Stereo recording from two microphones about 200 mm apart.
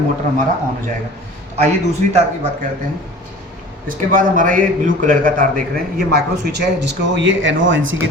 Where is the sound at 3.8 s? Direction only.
40° right (ahead or behind).